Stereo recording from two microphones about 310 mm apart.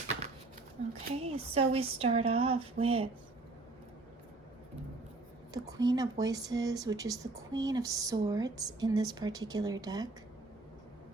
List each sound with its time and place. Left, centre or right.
1.0 s speech: centre
5.6 s speech: centre